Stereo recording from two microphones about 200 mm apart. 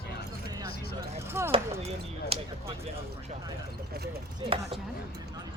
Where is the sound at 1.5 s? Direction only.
30° right (ahead or behind).